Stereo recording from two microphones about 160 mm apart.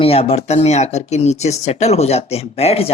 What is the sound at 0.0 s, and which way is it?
Speech, 40° left (ahead or behind).